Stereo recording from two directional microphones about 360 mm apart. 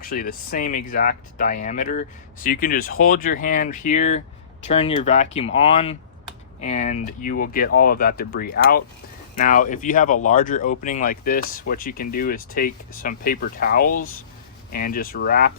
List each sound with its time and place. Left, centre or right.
0.0 s speech: left